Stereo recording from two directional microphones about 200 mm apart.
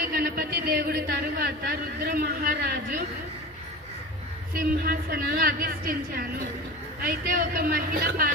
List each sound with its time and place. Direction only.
0.0 s speech: 45° right (ahead or behind)
4.5 s a woman's voice: 45° right (ahead or behind)